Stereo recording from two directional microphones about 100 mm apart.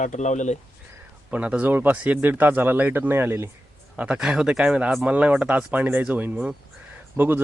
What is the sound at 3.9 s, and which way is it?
Speech, 10° right (ahead or behind).